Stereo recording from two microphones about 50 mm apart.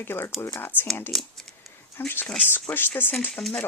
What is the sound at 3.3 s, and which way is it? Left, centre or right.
Chopping, centre.